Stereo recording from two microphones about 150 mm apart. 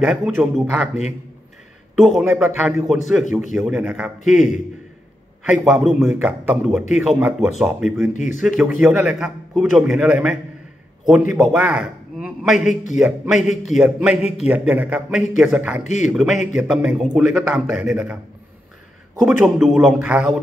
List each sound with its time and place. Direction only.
0.0 s a man's voice: 5° right (ahead or behind)
2.0 s a man's voice: centre (ahead or behind)
5.4 s a man's voice: 5° right (ahead or behind)
8.1 s speech: 55° left (ahead or behind)
8.4 s a man's voice: centre (ahead or behind)
11.5 s a man's voice: 10° right (ahead or behind)
19.1 s a man's voice: 5° right (ahead or behind)